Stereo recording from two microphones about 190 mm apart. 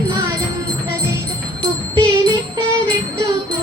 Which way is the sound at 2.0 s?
20° right (ahead or behind).